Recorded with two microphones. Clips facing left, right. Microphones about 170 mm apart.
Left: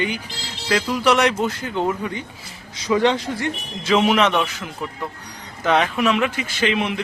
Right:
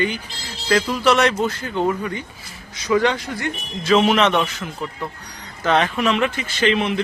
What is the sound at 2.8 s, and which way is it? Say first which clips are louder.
Speech: even; 25° left (ahead or behind).